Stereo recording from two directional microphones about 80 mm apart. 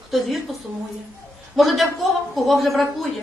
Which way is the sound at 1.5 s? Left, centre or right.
Centre.